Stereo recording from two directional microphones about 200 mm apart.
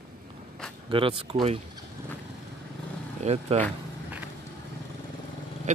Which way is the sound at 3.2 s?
35° right (ahead or behind).